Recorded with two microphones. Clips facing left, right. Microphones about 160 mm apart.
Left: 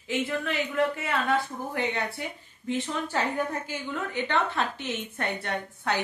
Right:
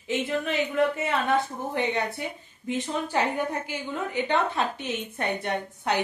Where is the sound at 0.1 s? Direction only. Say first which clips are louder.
Right 2 dB; 20° right (ahead or behind).